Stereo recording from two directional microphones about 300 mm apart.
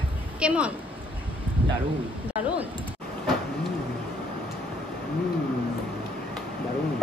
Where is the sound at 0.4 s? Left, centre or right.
Centre.